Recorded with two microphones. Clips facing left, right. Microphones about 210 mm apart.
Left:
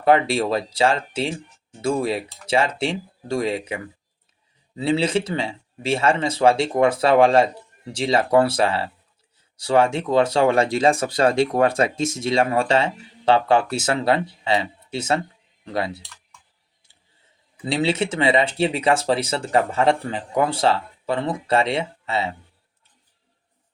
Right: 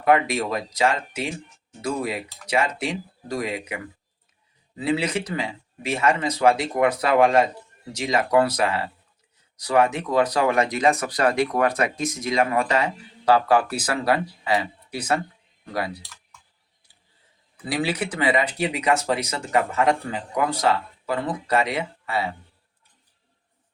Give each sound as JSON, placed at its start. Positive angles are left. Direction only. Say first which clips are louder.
{"t": 0.0, "sound": "speech", "louder": "left 2 dB", "side_deg": 30}
{"t": 4.8, "sound": "speech", "louder": "left 3 dB", "side_deg": 30}
{"t": 17.7, "sound": "speech", "louder": "left 4 dB", "side_deg": 25}